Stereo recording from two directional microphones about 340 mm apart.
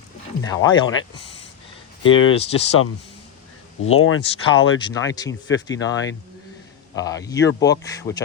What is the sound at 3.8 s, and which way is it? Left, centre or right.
Speech, left.